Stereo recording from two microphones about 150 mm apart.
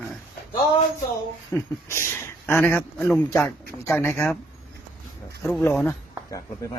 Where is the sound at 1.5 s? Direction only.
20° left (ahead or behind).